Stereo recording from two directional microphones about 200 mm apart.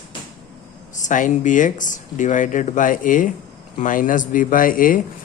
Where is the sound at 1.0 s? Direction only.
40° left (ahead or behind).